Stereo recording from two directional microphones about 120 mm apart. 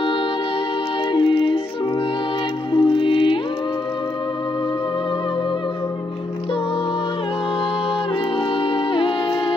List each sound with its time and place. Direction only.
1.1 s music: 45° left (ahead or behind)
2.7 s music: 45° left (ahead or behind)
8.6 s music: 45° left (ahead or behind)